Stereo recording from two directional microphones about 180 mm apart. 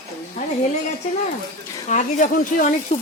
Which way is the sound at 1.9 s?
45° left (ahead or behind).